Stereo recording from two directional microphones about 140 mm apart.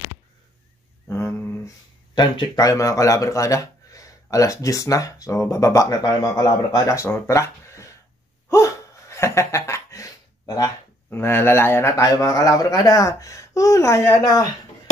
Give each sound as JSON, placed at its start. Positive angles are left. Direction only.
{"t": 1.0, "sound": "a sound", "side_deg": 20}
{"t": 2.1, "sound": "speech", "side_deg": 30}
{"t": 8.5, "sound": "laughter", "side_deg": 20}